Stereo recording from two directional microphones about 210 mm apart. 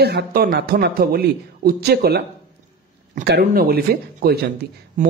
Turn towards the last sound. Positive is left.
turn(degrees=-40)  # may be behind; listen again after turning